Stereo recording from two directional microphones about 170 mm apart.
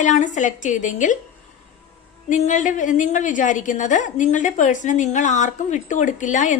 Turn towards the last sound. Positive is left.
turn(degrees=45)  # may be behind; listen again after turning